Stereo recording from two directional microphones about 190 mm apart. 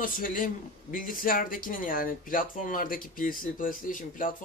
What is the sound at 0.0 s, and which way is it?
Speech, 45° left (ahead or behind).